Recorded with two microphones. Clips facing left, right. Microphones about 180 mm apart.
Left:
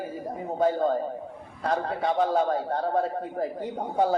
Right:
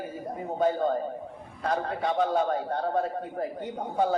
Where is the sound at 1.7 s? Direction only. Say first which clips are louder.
Left 2 dB; 30° left (ahead or behind).